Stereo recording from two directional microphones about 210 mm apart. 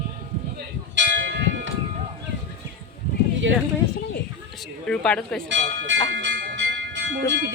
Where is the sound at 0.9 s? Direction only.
60° right (ahead or behind).